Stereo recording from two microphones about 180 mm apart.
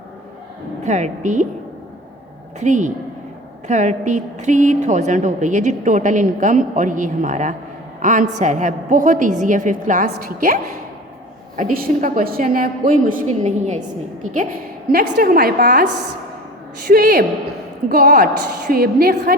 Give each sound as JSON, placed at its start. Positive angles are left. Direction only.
{"t": 0.9, "sound": "a woman's voice", "side_deg": -40}
{"t": 2.6, "sound": "a woman's voice", "side_deg": -45}
{"t": 14.9, "sound": "a woman's voice", "side_deg": -55}
{"t": 16.9, "sound": "a woman's voice", "side_deg": -55}